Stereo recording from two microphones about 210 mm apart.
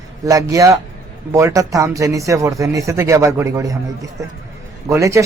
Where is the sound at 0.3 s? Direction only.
15° right (ahead or behind).